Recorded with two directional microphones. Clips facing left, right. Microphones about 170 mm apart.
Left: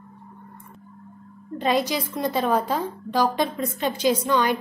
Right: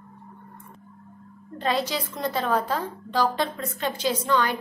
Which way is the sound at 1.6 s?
15° left (ahead or behind).